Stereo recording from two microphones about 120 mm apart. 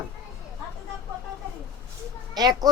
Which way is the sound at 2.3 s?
35° right (ahead or behind).